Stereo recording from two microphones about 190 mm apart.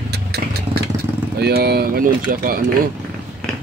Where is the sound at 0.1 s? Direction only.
60° right (ahead or behind).